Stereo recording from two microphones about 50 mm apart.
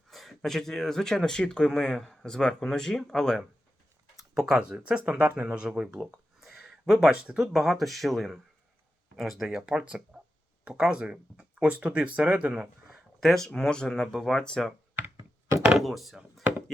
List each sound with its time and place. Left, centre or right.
0.1 s speech: centre
4.2 s speech: centre
6.4 s a sound: centre
7.3 s speech: centre
10.1 s a sound: centre
10.8 s speech: centre
13.2 s speech: centre
15.8 s speech: centre